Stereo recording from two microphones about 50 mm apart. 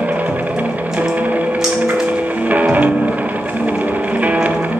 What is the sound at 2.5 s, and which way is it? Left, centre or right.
Music, right.